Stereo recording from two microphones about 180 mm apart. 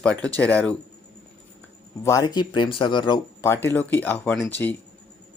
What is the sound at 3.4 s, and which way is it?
Speech, 15° left (ahead or behind).